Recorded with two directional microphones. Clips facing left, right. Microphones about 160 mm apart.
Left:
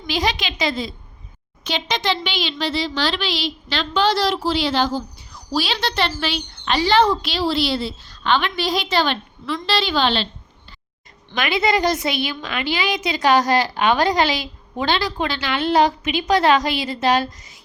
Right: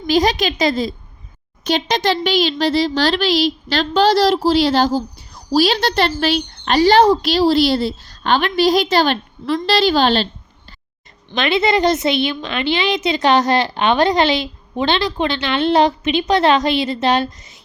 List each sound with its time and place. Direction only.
0.1 s a woman's voice: 40° right (ahead or behind)
11.3 s a woman's voice: 25° right (ahead or behind)